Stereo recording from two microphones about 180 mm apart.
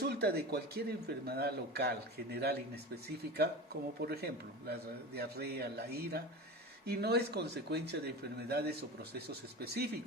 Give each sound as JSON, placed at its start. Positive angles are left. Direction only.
{"t": 0.0, "sound": "a man's voice", "side_deg": -65}